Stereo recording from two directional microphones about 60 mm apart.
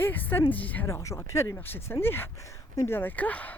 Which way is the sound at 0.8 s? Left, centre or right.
Left.